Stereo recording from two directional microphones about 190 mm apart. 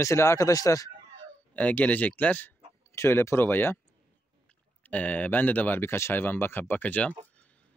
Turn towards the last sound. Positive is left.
turn(degrees=10)  # may be behind; listen again after turning